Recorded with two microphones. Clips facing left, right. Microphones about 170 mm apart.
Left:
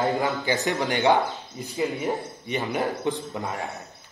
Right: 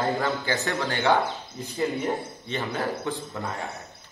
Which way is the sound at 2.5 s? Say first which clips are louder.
Left 2 dB; 15° left (ahead or behind).